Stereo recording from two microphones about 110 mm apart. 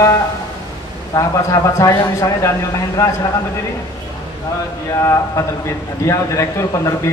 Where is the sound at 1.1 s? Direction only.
30° left (ahead or behind).